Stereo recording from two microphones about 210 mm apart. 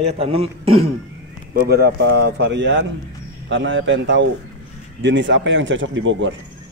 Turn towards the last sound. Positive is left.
turn(degrees=-65)  # may be behind; listen again after turning